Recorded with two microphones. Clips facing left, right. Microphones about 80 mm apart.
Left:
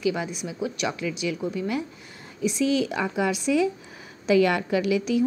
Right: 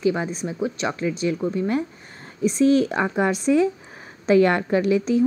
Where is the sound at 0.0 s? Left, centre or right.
Right.